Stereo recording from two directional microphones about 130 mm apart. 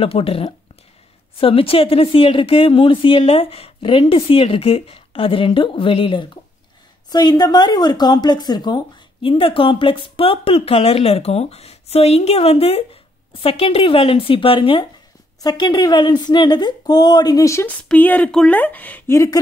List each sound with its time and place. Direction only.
0.0 s speech: 45° left (ahead or behind)
15.4 s speech: 30° left (ahead or behind)
17.6 s speech: 15° left (ahead or behind)